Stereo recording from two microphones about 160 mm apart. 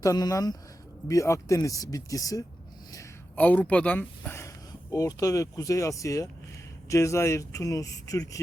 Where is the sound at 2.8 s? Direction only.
20° left (ahead or behind).